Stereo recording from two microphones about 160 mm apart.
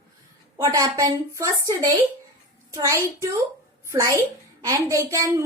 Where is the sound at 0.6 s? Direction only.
25° right (ahead or behind).